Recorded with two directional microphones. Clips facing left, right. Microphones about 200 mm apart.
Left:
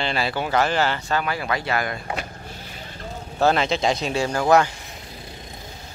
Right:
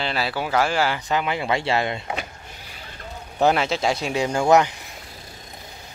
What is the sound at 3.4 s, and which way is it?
Speech, 10° right (ahead or behind).